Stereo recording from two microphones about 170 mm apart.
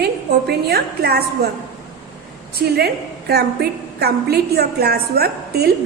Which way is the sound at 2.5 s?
70° right (ahead or behind).